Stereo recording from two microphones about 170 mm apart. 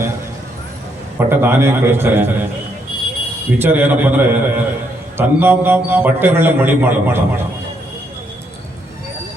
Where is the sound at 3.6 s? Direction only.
10° right (ahead or behind).